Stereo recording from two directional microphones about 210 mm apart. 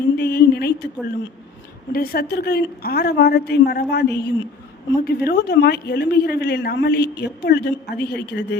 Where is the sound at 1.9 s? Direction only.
45° left (ahead or behind).